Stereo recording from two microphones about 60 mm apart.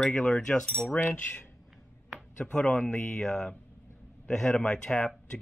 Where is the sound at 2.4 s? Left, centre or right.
Centre.